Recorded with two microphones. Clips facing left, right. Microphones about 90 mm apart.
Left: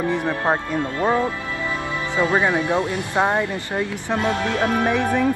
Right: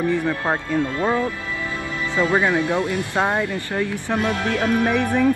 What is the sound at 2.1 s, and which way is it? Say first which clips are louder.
Speech: even; 20° left (ahead or behind).